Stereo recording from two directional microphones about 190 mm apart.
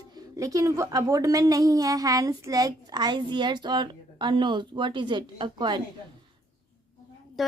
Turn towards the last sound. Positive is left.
turn(degrees=0)  # may be behind; listen again after turning